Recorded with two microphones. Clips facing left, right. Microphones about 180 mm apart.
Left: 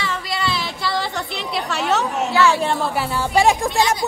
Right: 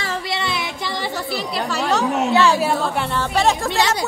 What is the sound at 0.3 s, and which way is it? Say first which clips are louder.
Female singing: even; 20° right (ahead or behind).